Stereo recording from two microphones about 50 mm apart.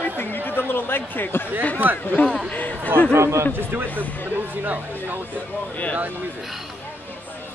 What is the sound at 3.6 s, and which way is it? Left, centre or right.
Speech, right.